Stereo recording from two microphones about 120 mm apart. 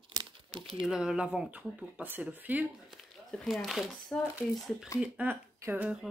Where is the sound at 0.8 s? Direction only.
5° right (ahead or behind).